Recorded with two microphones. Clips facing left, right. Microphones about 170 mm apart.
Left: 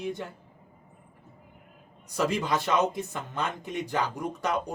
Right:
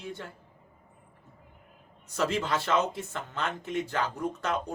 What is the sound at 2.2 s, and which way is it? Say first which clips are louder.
Speech: left 2 dB; 15° left (ahead or behind).